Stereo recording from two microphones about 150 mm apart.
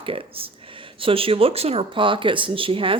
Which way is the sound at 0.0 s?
35° right (ahead or behind).